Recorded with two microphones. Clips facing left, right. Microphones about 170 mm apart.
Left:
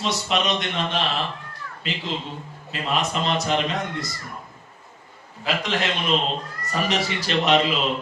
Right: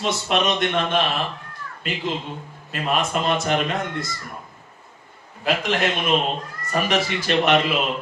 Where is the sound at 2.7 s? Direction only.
50° right (ahead or behind).